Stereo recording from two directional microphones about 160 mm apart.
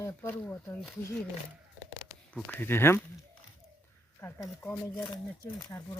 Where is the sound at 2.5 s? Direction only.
15° left (ahead or behind).